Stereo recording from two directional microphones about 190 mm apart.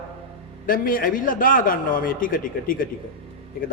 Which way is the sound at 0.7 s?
45° left (ahead or behind).